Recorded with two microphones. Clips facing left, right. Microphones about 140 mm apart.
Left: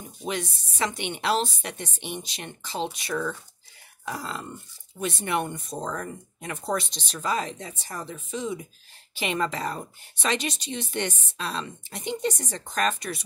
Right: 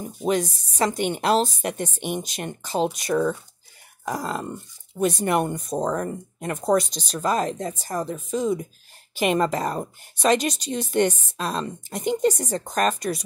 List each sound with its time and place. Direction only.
0.0 s a woman's voice: 45° right (ahead or behind)